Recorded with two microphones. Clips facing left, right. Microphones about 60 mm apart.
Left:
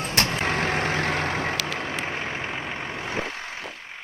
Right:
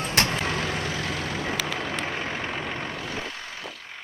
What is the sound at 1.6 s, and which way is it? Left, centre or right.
Vehicle, left.